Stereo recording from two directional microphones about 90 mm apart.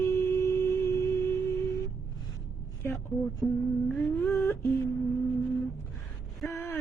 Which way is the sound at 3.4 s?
5° left (ahead or behind).